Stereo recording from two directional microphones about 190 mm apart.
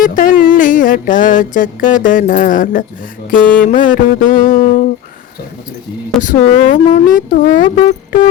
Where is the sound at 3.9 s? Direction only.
45° left (ahead or behind).